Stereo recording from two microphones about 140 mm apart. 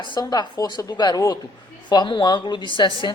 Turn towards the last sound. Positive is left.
turn(degrees=35)  # may be behind; listen again after turning